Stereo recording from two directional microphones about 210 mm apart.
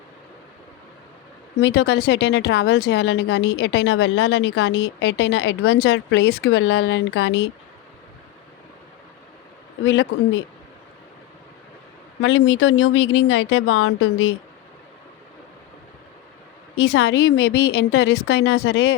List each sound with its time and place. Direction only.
1.6 s a woman's voice: 55° left (ahead or behind)
9.8 s a woman's voice: 60° left (ahead or behind)
12.2 s a woman's voice: 70° left (ahead or behind)
16.7 s a woman's voice: 65° left (ahead or behind)